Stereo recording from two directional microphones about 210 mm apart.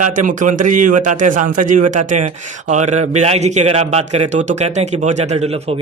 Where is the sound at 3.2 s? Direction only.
30° right (ahead or behind).